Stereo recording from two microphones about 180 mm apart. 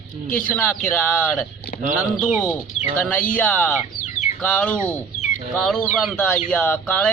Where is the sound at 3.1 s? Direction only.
10° left (ahead or behind).